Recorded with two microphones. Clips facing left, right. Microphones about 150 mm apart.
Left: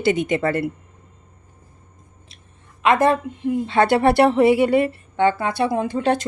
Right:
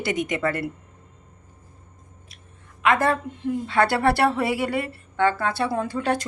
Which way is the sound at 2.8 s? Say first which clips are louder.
Left 4 dB; 20° left (ahead or behind).